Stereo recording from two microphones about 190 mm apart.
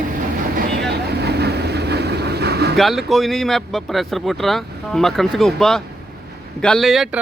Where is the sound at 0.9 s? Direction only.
60° right (ahead or behind).